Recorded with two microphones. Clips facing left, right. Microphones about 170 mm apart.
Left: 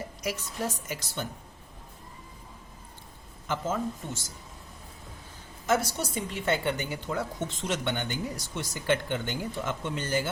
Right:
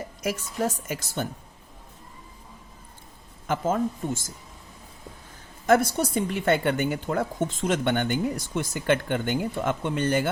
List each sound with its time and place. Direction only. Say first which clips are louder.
0.2 s a woman's voice: right 6 dB; 50° right (ahead or behind)
3.4 s a woman's voice: right 5 dB; 50° right (ahead or behind)
5.6 s a woman's voice: right 6 dB; 55° right (ahead or behind)